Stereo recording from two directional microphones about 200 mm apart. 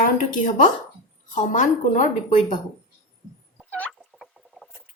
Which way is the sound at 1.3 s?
40° left (ahead or behind).